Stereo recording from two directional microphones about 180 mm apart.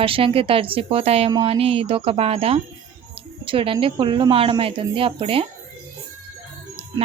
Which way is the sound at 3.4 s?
30° right (ahead or behind).